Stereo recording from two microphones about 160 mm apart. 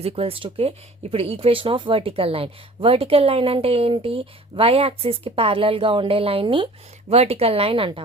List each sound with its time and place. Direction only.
0.0 s speech: 35° right (ahead or behind)